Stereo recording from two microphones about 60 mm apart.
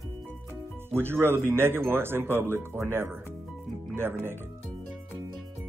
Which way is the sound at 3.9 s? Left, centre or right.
Right.